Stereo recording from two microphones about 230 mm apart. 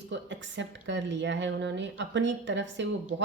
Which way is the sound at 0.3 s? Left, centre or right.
Right.